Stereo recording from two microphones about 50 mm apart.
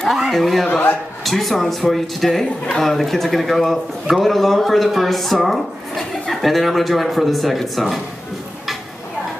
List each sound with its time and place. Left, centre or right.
0.2 s speech: centre
0.7 s a man's voice: left
1.2 s a man's voice: centre